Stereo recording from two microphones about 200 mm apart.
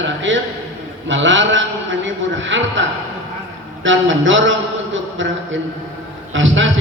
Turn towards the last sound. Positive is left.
turn(degrees=-70)  # may be behind; listen again after turning